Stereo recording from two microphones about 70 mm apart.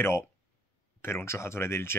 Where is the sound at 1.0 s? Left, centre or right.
Left.